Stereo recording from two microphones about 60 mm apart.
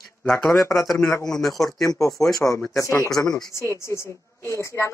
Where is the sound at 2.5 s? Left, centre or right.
Left.